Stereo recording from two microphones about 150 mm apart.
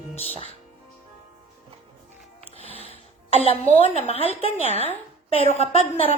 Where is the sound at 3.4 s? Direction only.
45° left (ahead or behind).